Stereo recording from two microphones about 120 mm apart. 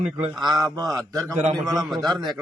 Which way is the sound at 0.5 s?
35° right (ahead or behind).